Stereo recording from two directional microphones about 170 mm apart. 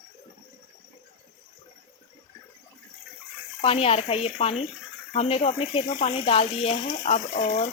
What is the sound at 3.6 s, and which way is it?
Speech, 35° left (ahead or behind).